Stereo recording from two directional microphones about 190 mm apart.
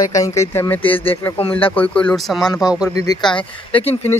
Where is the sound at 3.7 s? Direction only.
30° left (ahead or behind).